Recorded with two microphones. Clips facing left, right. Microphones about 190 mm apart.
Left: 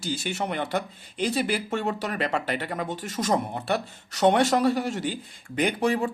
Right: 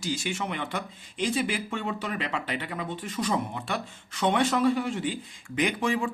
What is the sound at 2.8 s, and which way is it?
Speech, 80° left.